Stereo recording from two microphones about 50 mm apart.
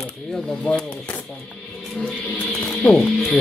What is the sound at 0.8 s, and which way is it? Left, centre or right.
Speech, left.